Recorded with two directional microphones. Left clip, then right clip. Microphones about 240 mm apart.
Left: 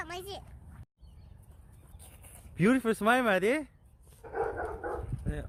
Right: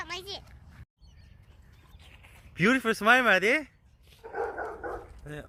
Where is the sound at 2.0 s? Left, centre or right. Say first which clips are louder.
Right 4 dB; left.